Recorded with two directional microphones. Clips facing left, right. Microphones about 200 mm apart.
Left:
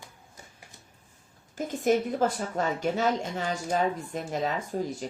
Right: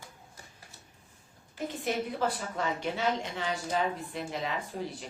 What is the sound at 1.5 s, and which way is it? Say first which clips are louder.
Speech: left 7 dB; 45° left (ahead or behind).